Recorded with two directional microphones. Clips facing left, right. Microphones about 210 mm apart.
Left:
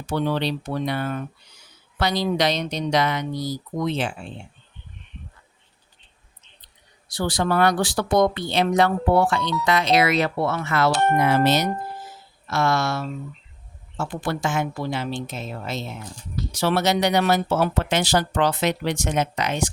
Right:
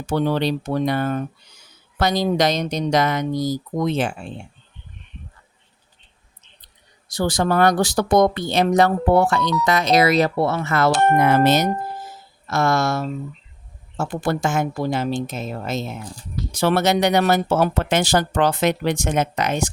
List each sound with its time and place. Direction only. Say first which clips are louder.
0.1 s speech: right 3 dB; 45° right (ahead or behind)
7.1 s speech: right 3 dB; 45° right (ahead or behind)